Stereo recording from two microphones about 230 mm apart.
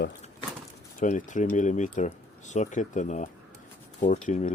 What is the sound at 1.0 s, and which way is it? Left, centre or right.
Speech, left.